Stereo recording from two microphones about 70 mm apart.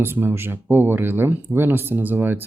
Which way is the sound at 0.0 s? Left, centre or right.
Right.